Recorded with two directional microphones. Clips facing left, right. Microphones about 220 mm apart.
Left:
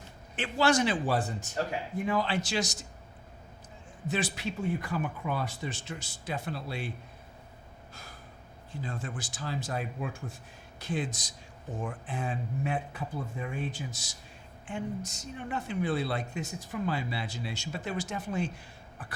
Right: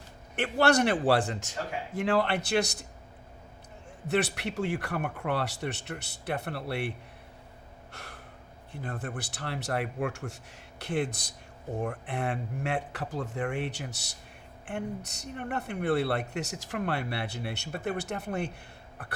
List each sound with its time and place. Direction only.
0.3 s speech: 60° right (ahead or behind)
4.0 s speech: 65° right (ahead or behind)
7.9 s gasp: 70° right (ahead or behind)
8.7 s speech: 60° right (ahead or behind); by 10.3 s 80° right
10.8 s speech: 65° right (ahead or behind)